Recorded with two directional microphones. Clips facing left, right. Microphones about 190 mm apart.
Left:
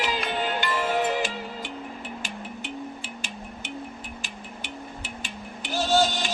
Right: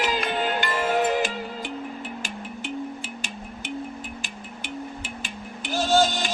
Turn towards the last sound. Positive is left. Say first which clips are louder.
# right 2 dB
turn(degrees=-50)  # may be behind; listen again after turning